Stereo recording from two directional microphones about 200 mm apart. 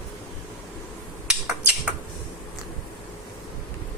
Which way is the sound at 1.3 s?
Centre (ahead or behind).